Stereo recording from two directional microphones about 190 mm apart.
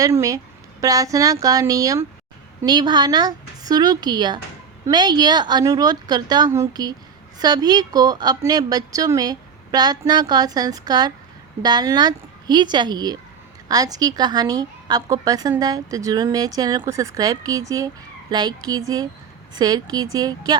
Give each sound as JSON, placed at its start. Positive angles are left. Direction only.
{"t": 0.0, "sound": "a woman's voice", "side_deg": -15}